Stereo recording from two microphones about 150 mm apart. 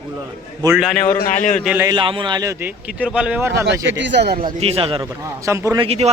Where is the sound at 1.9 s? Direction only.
35° right (ahead or behind); by 3.9 s 15° right (ahead or behind).